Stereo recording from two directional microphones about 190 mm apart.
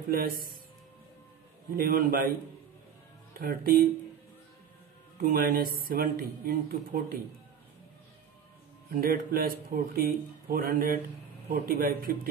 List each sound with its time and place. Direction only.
0.1 s speech: 50° right (ahead or behind)
1.8 s speech: 50° right (ahead or behind)
3.3 s speech: 50° right (ahead or behind)
5.1 s speech: 50° right (ahead or behind)
8.9 s speech: 50° right (ahead or behind)